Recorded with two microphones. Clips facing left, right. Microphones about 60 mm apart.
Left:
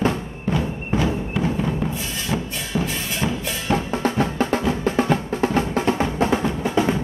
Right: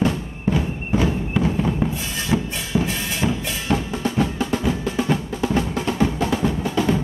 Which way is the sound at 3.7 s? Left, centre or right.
Left.